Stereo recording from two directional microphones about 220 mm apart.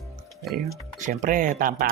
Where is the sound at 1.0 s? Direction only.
35° right (ahead or behind).